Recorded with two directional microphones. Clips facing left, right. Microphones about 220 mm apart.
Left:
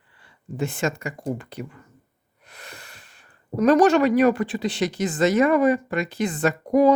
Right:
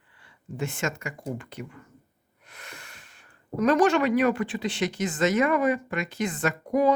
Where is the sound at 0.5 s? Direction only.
35° left (ahead or behind).